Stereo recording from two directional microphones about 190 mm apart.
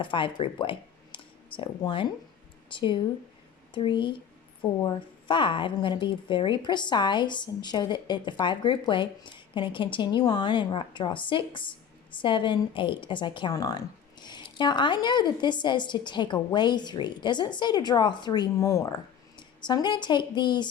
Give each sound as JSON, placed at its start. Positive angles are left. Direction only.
{"t": 0.0, "sound": "a woman's voice", "side_deg": 25}